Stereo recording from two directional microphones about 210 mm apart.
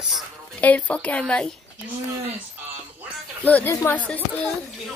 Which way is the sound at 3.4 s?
10° left (ahead or behind).